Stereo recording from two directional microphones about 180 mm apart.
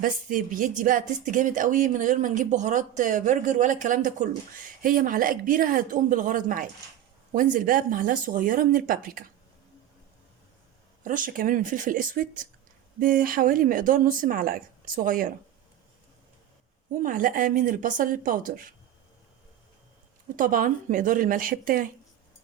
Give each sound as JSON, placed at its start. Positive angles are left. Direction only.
{"t": 0.0, "sound": "speech", "side_deg": -50}
{"t": 11.0, "sound": "speech", "side_deg": -50}
{"t": 16.9, "sound": "speech", "side_deg": -50}
{"t": 20.3, "sound": "speech", "side_deg": -50}